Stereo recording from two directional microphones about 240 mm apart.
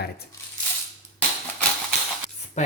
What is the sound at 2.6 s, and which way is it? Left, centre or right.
Speech, left.